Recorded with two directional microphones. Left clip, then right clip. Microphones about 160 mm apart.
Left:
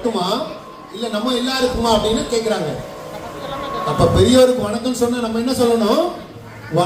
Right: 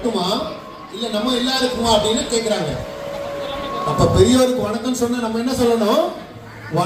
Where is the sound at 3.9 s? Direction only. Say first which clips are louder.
Left 2 dB; 15° right (ahead or behind).